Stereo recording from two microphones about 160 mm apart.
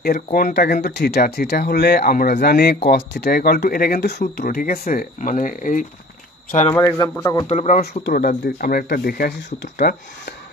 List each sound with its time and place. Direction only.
0.3 s speech: 80° left; by 5.9 s 55° left (ahead or behind)
6.7 s a man's voice: 20° left (ahead or behind)
7.4 s speech: 50° left (ahead or behind)
8.0 s speech: 65° left (ahead or behind); by 10.3 s 90° left